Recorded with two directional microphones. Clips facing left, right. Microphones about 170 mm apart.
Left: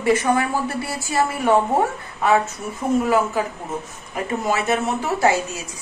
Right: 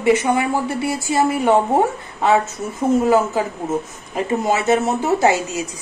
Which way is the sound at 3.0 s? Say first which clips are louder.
Right 2 dB; 25° right (ahead or behind).